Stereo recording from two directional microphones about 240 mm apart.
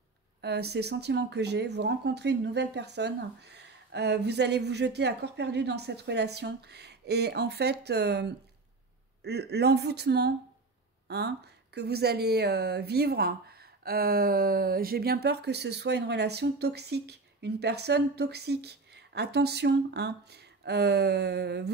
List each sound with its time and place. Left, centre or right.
0.4 s speech: right